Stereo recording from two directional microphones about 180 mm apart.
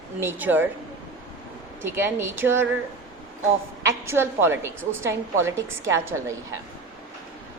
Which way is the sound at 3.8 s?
15° right (ahead or behind).